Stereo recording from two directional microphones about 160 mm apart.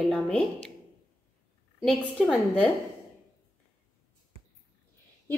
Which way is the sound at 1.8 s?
5° left (ahead or behind).